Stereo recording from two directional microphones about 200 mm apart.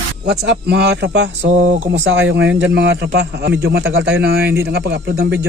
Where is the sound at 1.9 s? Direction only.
65° right (ahead or behind).